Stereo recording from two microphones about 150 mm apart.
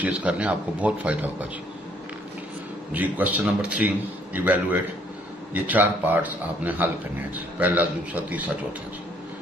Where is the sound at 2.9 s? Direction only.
10° right (ahead or behind).